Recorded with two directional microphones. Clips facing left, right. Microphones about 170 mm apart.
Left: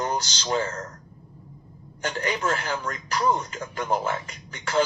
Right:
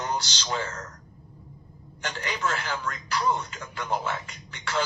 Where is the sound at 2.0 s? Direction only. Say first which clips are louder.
Left 4 dB; 35° left (ahead or behind).